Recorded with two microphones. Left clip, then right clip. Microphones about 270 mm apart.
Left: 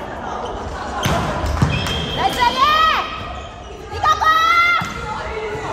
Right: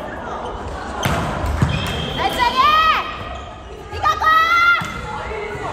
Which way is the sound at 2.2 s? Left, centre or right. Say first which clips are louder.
Even; left.